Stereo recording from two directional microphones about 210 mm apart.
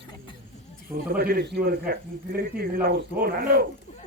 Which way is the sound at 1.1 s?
45° right (ahead or behind).